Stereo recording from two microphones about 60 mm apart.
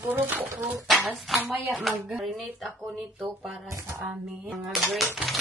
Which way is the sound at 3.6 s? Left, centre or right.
Right.